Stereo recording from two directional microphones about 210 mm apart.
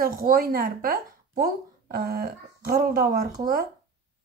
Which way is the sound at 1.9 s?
45° right (ahead or behind).